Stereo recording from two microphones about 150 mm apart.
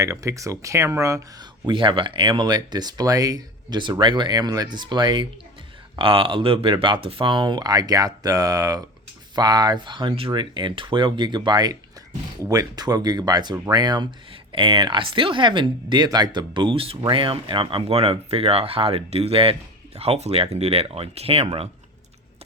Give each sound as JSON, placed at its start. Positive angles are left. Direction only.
{"t": 0.0, "sound": "speech", "side_deg": -20}